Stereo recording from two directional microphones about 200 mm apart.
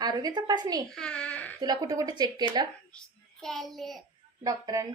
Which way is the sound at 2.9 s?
5° left (ahead or behind).